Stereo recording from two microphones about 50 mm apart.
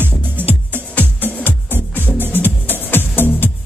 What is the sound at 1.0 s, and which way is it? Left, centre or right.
Music, left.